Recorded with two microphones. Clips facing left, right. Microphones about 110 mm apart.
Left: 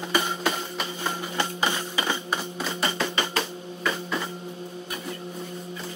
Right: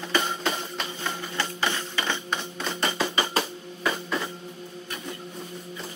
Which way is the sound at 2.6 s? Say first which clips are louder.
Right 2 dB; centre (ahead or behind).